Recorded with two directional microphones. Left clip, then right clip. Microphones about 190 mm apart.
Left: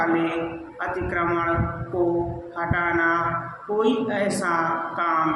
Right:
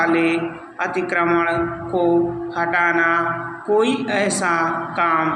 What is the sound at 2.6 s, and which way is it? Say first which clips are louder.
A man's voice: right 5 dB; 20° right (ahead or behind).